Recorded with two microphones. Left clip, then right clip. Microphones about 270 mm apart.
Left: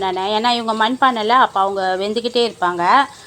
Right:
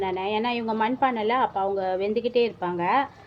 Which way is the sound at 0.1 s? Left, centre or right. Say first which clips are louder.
Left 9 dB; left.